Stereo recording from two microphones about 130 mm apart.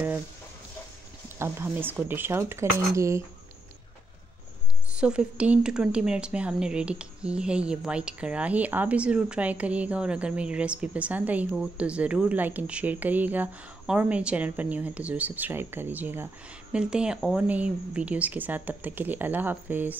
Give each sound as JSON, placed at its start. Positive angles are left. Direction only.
{"t": 1.4, "sound": "a woman's voice", "side_deg": -15}
{"t": 4.9, "sound": "a woman's voice", "side_deg": -10}